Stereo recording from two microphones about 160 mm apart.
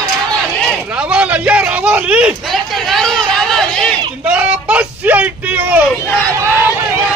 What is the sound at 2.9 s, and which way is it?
Chatter, centre (ahead or behind).